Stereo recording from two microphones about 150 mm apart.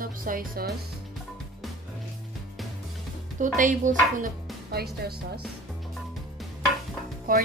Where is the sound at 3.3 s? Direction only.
60° right (ahead or behind).